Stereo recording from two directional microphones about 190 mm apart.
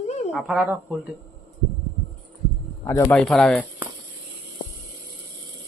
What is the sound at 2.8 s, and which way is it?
Speech, 20° left (ahead or behind).